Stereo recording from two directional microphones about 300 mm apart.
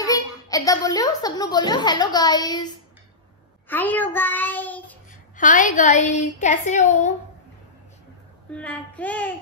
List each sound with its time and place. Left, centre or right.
0.0 s a child's voice: centre
3.6 s child singing: centre
5.3 s a woman's voice: left
8.5 s child singing: centre